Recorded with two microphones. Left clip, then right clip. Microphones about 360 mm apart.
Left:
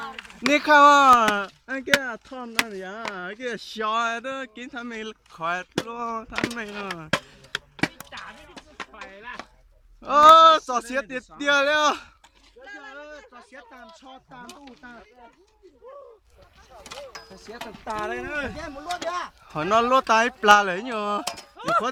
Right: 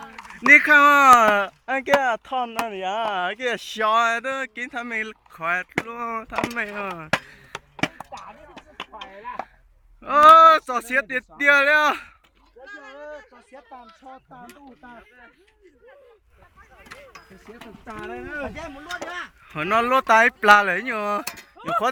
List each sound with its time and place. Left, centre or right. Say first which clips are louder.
0.2 s a sound: right 9 dB; centre
0.5 s speech: right 2 dB; centre
7.1 s chop: even; centre
8.8 s a sound: right 3 dB; centre
10.0 s speech: right 1 dB; centre
17.6 s speech: left 7 dB; centre
19.1 s speech: left 2 dB; centre